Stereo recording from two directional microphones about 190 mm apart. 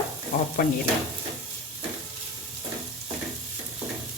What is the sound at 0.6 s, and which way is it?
Speech, 50° left (ahead or behind).